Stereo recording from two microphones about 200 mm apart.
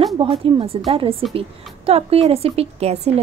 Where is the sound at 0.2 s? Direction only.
25° right (ahead or behind).